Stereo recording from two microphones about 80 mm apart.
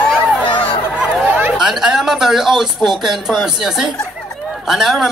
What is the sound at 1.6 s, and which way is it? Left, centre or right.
A woman's voice, centre.